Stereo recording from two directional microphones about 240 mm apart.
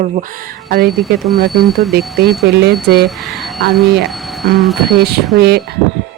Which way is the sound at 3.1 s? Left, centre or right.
Centre.